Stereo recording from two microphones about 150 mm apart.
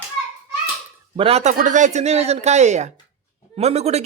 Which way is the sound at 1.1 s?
40° right (ahead or behind).